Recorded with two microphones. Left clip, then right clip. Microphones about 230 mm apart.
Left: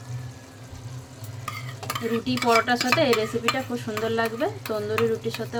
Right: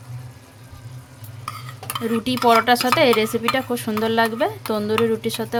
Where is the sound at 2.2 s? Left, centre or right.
Right.